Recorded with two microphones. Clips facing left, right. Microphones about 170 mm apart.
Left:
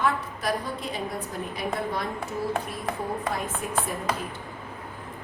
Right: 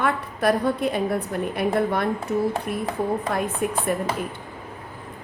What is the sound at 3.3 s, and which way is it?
Speech, 60° right (ahead or behind).